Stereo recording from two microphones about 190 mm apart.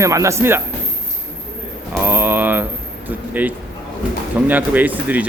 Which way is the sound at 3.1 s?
10° right (ahead or behind).